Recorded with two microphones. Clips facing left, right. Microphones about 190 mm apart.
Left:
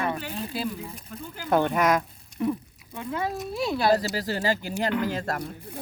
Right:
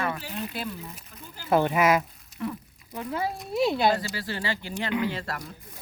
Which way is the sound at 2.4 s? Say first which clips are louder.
Left 6 dB; 15° left (ahead or behind).